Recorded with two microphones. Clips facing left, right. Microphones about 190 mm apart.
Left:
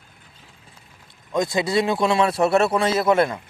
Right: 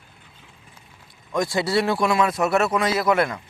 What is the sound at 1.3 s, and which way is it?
Speech, 20° left (ahead or behind).